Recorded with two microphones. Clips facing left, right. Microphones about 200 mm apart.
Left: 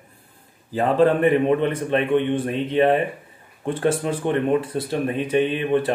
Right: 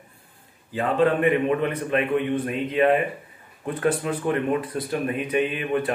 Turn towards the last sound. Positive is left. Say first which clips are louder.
# left 4 dB
turn(degrees=30)  # may be behind; listen again after turning